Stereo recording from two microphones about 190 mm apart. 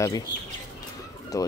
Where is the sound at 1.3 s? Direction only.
20° left (ahead or behind).